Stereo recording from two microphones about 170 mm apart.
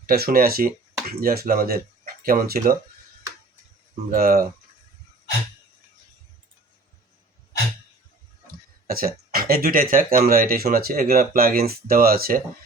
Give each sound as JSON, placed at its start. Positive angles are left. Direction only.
{"t": 0.0, "sound": "speech", "side_deg": -65}
{"t": 4.1, "sound": "speech", "side_deg": -60}
{"t": 8.9, "sound": "speech", "side_deg": -60}